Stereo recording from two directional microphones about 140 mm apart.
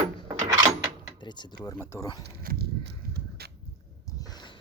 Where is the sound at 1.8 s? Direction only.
20° left (ahead or behind).